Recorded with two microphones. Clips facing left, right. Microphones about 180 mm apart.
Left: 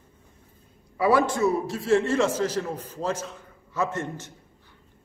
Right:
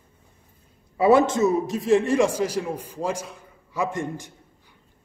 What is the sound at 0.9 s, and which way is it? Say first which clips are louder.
A man's voice: right 4 dB; 25° right (ahead or behind).